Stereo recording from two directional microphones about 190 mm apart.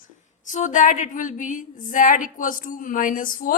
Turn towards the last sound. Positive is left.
turn(degrees=45)  # may be behind; listen again after turning